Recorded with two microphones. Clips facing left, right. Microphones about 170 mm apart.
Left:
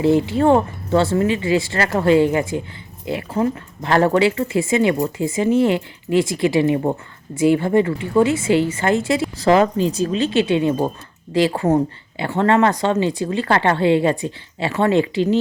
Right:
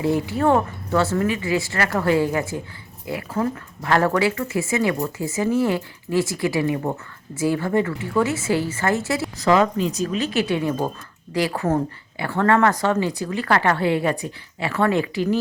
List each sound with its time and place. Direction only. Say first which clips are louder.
0.0 s speech: left 5 dB; 25° left (ahead or behind)